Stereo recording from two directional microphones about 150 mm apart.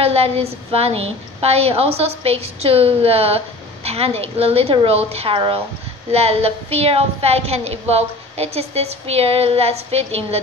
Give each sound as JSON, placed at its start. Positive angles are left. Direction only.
{"t": 0.0, "sound": "a woman's voice", "side_deg": -40}